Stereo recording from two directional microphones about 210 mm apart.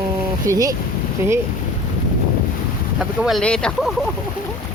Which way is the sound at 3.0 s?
Centre (ahead or behind).